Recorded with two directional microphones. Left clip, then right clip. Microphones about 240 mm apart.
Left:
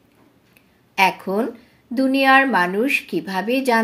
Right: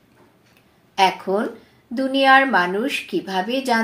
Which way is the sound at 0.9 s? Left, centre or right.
Left.